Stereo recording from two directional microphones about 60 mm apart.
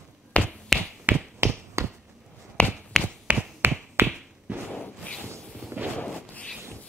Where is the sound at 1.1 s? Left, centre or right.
Right.